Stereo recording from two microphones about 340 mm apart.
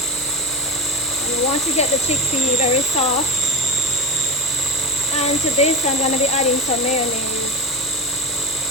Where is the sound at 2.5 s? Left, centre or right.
Centre.